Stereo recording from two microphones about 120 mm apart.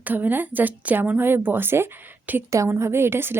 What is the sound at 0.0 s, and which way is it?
A woman's voice, 15° right (ahead or behind).